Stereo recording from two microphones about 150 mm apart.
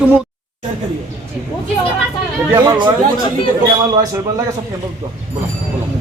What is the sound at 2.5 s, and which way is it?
Speech, 25° right (ahead or behind).